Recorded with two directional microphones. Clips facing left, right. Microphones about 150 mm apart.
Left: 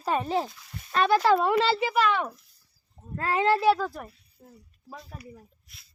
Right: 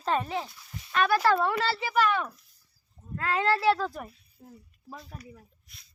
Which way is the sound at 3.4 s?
15° left (ahead or behind).